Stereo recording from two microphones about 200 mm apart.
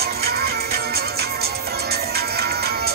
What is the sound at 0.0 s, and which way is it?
Music, 50° right (ahead or behind).